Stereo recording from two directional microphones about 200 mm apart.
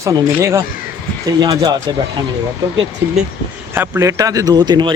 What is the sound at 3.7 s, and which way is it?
Speech, 15° right (ahead or behind).